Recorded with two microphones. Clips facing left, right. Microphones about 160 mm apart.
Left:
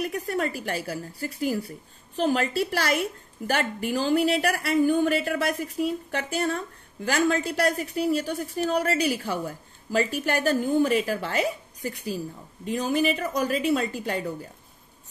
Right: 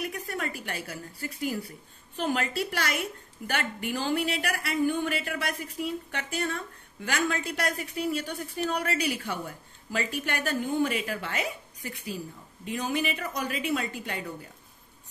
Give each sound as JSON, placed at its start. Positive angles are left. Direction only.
{"t": 0.0, "sound": "a woman's voice", "side_deg": 35}